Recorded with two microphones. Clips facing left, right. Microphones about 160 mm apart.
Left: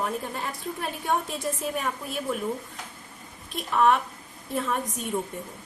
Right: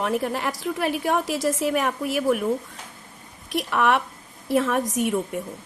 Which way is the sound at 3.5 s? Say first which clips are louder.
Right 1 dB; 75° right (ahead or behind).